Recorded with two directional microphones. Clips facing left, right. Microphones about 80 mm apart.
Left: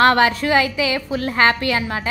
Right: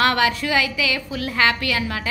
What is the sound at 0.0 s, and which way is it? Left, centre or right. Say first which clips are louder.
A woman's voice: left 5 dB; left.